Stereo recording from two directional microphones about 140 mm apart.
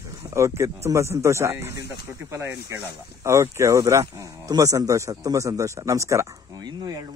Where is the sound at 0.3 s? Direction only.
20° right (ahead or behind).